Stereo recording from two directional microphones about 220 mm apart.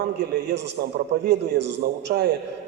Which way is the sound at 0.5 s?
50° right (ahead or behind).